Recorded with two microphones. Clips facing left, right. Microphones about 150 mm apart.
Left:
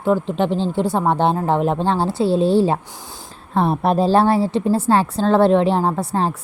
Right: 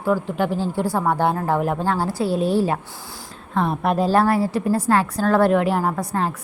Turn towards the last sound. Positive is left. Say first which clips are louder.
# left 3 dB
turn(degrees=30)  # may be behind; listen again after turning